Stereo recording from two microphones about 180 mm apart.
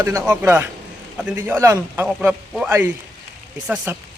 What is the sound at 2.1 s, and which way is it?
Speech, 5° right (ahead or behind).